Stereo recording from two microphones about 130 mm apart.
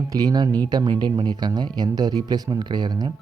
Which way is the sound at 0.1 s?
30° right (ahead or behind).